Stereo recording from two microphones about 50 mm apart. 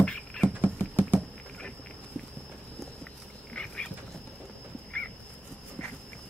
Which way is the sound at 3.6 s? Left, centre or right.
Centre.